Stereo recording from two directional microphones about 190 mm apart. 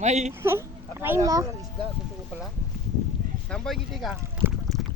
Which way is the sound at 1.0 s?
15° right (ahead or behind).